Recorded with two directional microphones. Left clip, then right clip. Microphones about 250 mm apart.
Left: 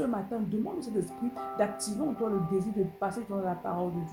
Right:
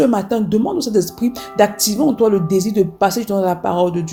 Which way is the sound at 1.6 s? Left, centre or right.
Right.